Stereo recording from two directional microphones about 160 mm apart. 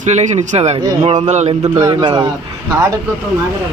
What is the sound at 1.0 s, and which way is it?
Speech, 30° right (ahead or behind).